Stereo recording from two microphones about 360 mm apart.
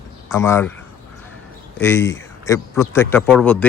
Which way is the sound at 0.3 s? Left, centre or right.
Centre.